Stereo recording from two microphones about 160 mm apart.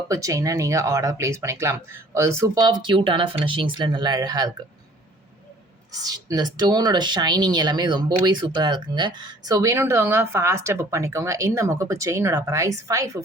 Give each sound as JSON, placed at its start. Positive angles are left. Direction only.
{"t": 0.1, "sound": "speech", "side_deg": -20}
{"t": 5.9, "sound": "speech", "side_deg": -20}